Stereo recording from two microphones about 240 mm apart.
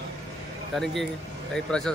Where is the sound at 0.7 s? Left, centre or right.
Centre.